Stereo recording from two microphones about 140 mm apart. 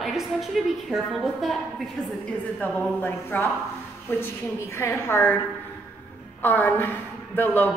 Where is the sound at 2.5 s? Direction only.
10° left (ahead or behind).